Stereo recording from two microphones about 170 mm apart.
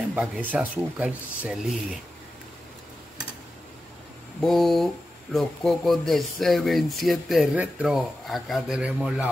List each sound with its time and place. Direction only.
0.1 s speech: 10° right (ahead or behind)
4.4 s speech: centre (ahead or behind)